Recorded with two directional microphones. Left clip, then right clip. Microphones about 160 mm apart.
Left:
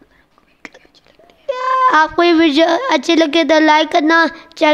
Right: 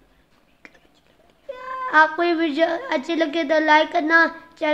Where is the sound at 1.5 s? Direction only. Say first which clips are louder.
Left 12 dB; 60° left (ahead or behind).